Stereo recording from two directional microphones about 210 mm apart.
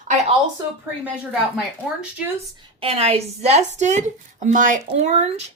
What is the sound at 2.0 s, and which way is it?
Speech, 5° right (ahead or behind).